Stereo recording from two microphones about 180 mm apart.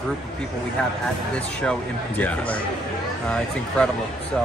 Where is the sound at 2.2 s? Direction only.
10° left (ahead or behind).